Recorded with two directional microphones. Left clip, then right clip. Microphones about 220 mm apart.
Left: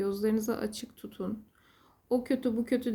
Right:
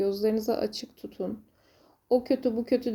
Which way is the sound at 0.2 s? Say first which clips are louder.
Right 4 dB; 15° left (ahead or behind).